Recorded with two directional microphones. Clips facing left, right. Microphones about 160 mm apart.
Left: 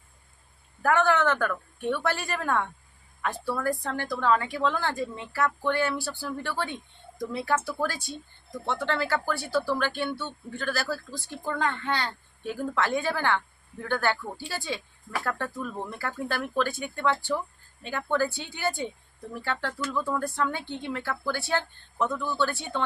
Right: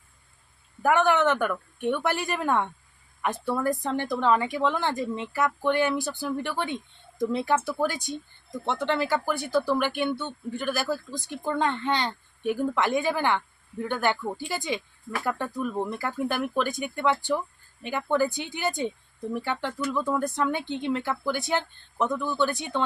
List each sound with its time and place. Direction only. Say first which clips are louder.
0.8 s a woman's voice: right 1 dB; 15° right (ahead or behind)